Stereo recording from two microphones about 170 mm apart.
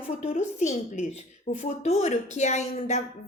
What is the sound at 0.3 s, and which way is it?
A woman's voice, 40° left (ahead or behind).